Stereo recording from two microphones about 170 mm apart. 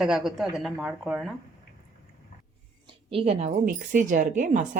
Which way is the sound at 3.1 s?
35° right (ahead or behind).